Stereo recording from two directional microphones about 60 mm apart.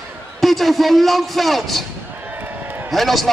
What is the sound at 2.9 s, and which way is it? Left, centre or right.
Speech, centre.